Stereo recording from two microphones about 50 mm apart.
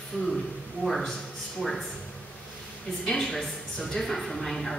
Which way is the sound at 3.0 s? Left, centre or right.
Centre.